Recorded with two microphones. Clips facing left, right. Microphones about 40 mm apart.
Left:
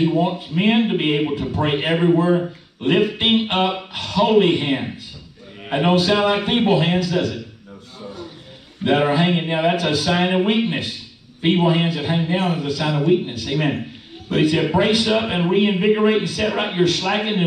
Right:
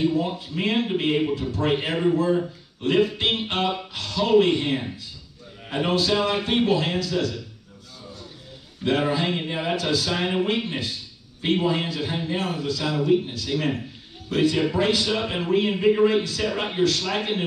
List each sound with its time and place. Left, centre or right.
0.0 s a man's voice: left
8.0 s music: left
8.8 s a man's voice: left